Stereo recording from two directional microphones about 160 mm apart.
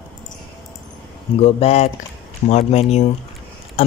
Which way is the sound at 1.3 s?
40° left (ahead or behind).